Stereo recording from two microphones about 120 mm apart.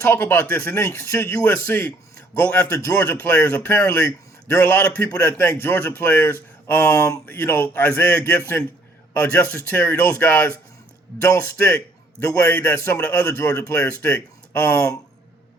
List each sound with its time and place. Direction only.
0.0 s a man's voice: 20° left (ahead or behind)